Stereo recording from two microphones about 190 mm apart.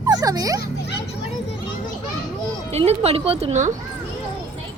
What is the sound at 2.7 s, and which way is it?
Speech, 35° right (ahead or behind).